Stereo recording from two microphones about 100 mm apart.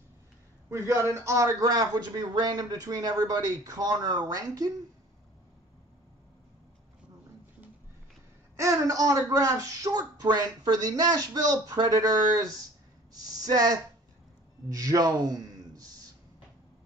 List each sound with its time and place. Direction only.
0.7 s a man's voice: 30° right (ahead or behind)
8.5 s a man's voice: 30° right (ahead or behind)